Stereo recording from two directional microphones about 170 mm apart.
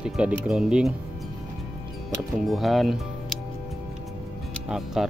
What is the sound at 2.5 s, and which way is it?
Speech, centre (ahead or behind).